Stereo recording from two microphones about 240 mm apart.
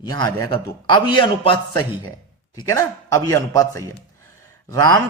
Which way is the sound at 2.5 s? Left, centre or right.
Centre.